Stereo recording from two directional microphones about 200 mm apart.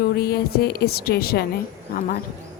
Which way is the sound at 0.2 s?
50° left (ahead or behind).